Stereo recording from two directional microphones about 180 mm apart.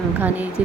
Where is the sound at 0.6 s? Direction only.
10° right (ahead or behind).